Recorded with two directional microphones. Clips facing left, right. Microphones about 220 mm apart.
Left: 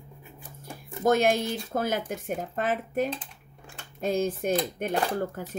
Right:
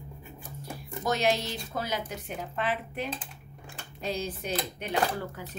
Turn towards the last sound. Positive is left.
turn(degrees=50)  # may be behind; listen again after turning